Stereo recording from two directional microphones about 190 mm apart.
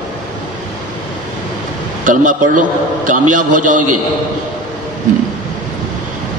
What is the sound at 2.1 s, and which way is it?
A man's voice, 45° right (ahead or behind).